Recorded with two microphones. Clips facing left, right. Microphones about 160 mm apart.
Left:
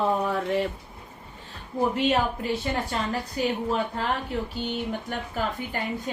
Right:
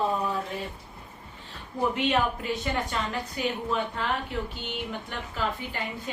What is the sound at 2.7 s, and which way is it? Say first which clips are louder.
A woman's voice: left 2 dB; 35° left (ahead or behind).